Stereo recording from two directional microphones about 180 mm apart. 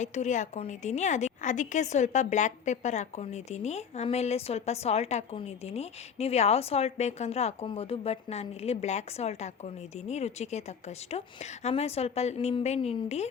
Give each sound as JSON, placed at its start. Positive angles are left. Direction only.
{"t": 0.0, "sound": "a woman's voice", "side_deg": 40}